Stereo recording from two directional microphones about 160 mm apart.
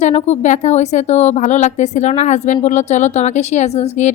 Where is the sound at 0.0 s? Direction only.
45° left (ahead or behind).